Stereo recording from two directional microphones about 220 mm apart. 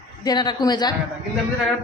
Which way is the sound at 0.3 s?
20° left (ahead or behind).